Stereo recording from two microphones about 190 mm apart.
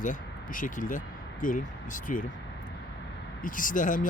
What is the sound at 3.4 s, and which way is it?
Speech, 45° left (ahead or behind).